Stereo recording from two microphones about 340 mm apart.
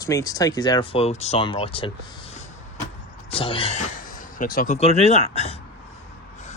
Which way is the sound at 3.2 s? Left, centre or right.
Centre.